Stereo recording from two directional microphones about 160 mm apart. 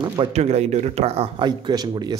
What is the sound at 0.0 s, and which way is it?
Speech, 30° right (ahead or behind).